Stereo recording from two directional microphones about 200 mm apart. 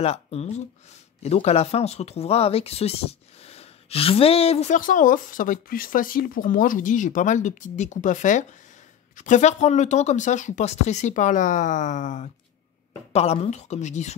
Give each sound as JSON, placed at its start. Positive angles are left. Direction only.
{"t": 0.0, "sound": "speech", "side_deg": 30}